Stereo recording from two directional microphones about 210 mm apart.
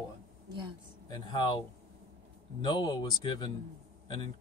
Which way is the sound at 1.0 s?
20° left (ahead or behind).